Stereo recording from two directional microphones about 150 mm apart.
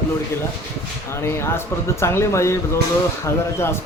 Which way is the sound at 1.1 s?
15° left (ahead or behind).